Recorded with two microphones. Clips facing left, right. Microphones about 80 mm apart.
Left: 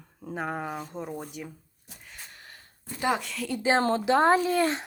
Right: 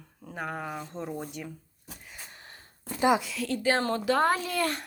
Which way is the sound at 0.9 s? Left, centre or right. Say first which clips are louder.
Even; centre.